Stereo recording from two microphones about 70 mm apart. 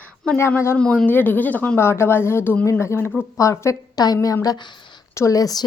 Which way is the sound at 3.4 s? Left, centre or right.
Left.